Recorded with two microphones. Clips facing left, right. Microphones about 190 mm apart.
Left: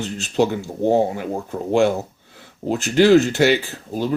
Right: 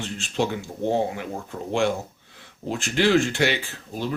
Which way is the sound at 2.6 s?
40° left (ahead or behind).